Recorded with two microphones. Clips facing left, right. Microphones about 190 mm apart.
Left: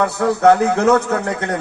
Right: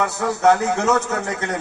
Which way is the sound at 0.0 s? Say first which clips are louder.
Left 4 dB; 60° left (ahead or behind).